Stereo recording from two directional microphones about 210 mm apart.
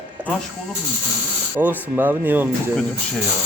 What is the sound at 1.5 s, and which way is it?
Speech, 10° right (ahead or behind).